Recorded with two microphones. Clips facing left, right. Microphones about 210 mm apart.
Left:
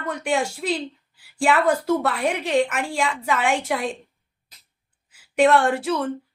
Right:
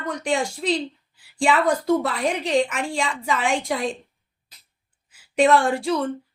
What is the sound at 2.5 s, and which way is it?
Speech, 60° left (ahead or behind).